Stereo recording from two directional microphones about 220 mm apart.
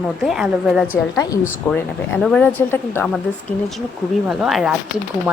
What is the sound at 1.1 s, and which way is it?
Speech, 15° left (ahead or behind).